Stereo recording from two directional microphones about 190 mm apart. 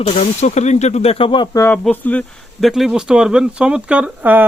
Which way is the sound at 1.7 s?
5° left (ahead or behind).